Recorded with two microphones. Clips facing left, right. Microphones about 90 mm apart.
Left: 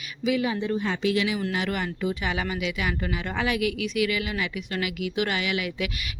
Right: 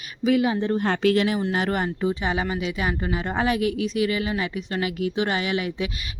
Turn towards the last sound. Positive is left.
turn(degrees=-35)  # may be behind; listen again after turning